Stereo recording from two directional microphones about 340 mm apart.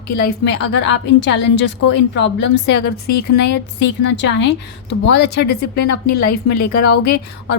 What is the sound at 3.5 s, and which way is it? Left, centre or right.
A woman's voice, left.